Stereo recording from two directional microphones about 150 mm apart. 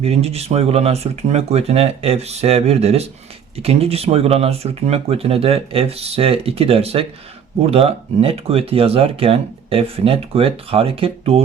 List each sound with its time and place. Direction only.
0.0 s speech: 45° right (ahead or behind)